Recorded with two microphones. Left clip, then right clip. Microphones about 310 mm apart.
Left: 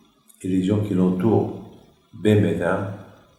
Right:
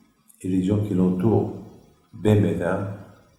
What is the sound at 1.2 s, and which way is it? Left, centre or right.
Speech, left.